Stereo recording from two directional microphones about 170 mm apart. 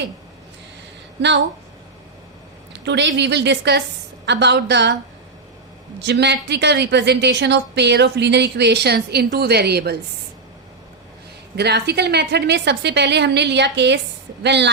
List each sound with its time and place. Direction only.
1.2 s a woman's voice: 90° right
2.8 s a woman's voice: 90° right
6.0 s a woman's voice: 85° right; by 10.0 s 70° right (ahead or behind)
11.5 s a woman's voice: 80° right